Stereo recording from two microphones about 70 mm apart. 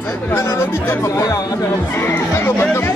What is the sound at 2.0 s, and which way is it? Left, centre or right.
Speech, left.